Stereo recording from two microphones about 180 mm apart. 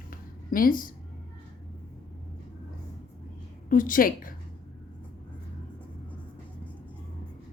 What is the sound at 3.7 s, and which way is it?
Speech, 50° left (ahead or behind).